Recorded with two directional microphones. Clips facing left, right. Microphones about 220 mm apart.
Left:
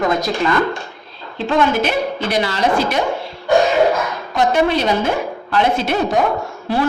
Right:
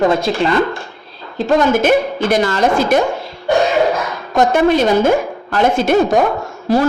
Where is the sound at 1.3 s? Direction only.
45° right (ahead or behind).